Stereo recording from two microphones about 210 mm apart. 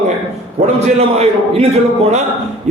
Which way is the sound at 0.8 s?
30° right (ahead or behind).